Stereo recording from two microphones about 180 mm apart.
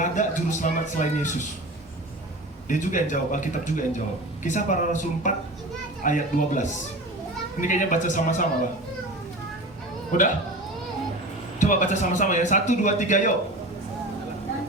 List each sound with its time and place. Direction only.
0.0 s a man's voice: 45° left (ahead or behind)
2.6 s a man's voice: 45° left (ahead or behind)
10.1 s a man's voice: 45° left (ahead or behind)
11.6 s a man's voice: 45° left (ahead or behind)